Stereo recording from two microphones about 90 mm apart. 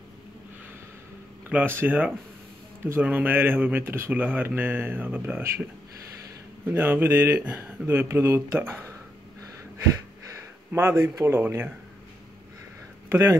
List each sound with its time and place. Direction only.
1.5 s speech: 20° right (ahead or behind)
6.6 s speech: 20° right (ahead or behind)
10.3 s speech: 25° right (ahead or behind)